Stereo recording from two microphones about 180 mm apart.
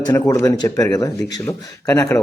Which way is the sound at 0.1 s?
15° left (ahead or behind).